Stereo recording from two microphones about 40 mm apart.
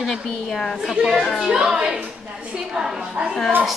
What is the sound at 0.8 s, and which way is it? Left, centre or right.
A woman's voice, centre.